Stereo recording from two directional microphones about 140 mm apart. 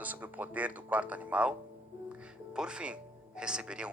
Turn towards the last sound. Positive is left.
turn(degrees=-5)  # may be behind; listen again after turning